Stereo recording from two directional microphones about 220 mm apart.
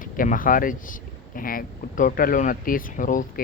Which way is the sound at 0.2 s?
40° left (ahead or behind).